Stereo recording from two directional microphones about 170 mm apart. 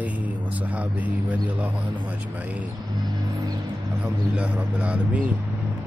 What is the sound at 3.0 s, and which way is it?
Vehicle, 25° right (ahead or behind).